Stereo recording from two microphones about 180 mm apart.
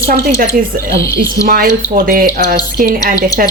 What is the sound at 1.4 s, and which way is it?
Speech, 50° right (ahead or behind).